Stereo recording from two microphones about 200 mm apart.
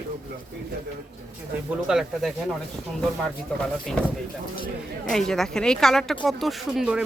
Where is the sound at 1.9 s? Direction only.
Centre (ahead or behind).